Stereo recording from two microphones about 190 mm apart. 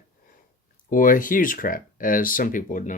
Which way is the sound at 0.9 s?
45° left (ahead or behind).